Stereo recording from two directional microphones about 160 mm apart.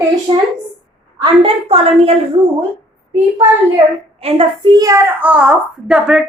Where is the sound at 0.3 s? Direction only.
25° right (ahead or behind).